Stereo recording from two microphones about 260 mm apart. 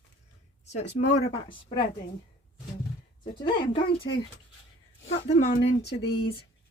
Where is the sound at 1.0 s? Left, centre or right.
Left.